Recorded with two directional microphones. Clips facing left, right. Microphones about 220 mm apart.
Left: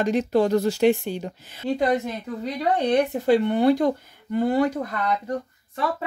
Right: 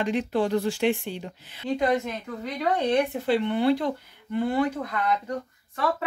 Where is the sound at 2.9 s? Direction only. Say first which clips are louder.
Left 6 dB; 45° left (ahead or behind).